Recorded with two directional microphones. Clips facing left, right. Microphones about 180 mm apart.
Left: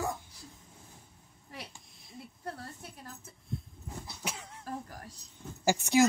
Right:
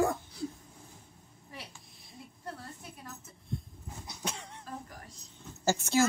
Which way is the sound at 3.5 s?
Centre (ahead or behind).